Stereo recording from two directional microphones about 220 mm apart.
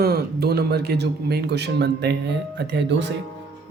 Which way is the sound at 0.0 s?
45° right (ahead or behind).